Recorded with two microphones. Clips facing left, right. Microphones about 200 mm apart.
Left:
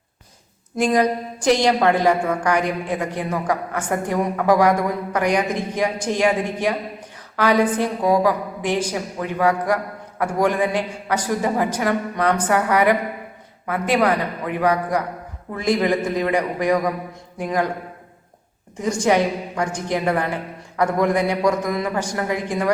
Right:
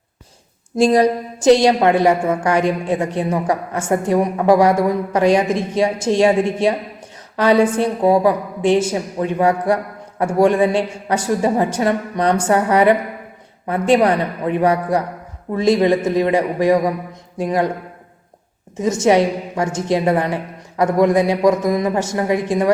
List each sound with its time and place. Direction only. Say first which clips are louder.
0.8 s a woman's voice: right 5 dB; 30° right (ahead or behind)
7.3 s a woman's voice: right 4 dB; 25° right (ahead or behind)
18.8 s a woman's voice: right 4 dB; 20° right (ahead or behind)